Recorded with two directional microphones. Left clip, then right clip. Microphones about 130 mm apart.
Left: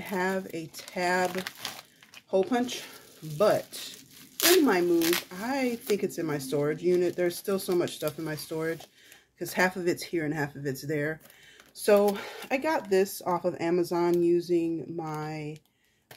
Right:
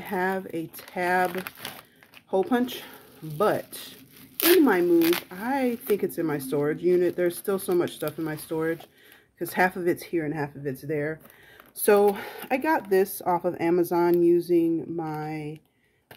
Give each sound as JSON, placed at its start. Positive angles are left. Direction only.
{"t": 0.0, "sound": "speech", "side_deg": -30}
{"t": 1.6, "sound": "speech", "side_deg": -25}
{"t": 2.3, "sound": "speech", "side_deg": -40}
{"t": 4.4, "sound": "zipper", "side_deg": -20}
{"t": 4.9, "sound": "speech", "side_deg": -10}
{"t": 5.3, "sound": "speech", "side_deg": -30}
{"t": 10.1, "sound": "speech", "side_deg": -10}
{"t": 11.8, "sound": "speech", "side_deg": -60}
{"t": 12.2, "sound": "speech", "side_deg": -45}